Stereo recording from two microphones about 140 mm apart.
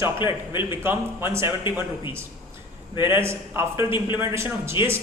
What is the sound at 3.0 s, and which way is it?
A man's voice, 15° right (ahead or behind).